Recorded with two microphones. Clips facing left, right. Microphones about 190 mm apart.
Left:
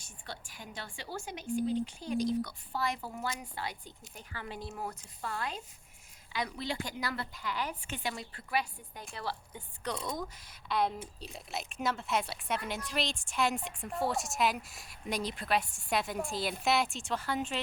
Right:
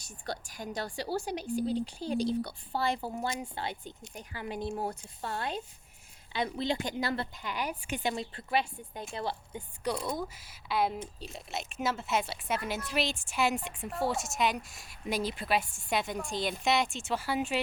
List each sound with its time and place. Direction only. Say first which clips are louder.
0.0 s a woman's voice: right 7 dB; 40° right (ahead or behind); by 4.7 s 15° right (ahead or behind)
4.7 s a woman's voice: right 6 dB; 30° right (ahead or behind)
9.9 s a woman's voice: right 3 dB; 5° right (ahead or behind)